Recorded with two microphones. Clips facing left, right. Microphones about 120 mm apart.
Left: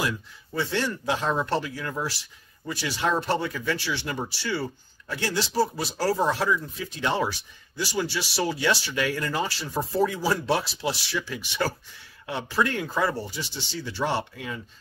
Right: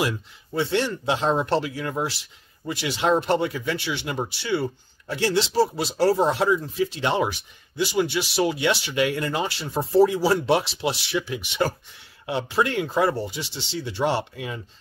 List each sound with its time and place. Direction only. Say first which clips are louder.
0.0 s speech: right 3 dB; 25° right (ahead or behind)